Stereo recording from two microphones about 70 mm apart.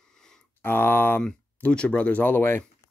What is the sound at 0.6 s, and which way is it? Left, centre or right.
Speech, left.